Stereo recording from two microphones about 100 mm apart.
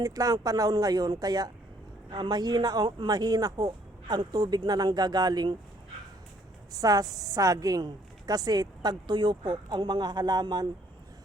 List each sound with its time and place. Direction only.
0.0 s speech: 35° right (ahead or behind)
2.0 s a woman's voice: 55° right (ahead or behind)
6.7 s a woman's voice: 35° right (ahead or behind)